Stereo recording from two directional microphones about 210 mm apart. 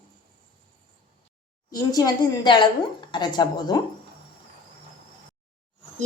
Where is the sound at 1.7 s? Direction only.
20° left (ahead or behind).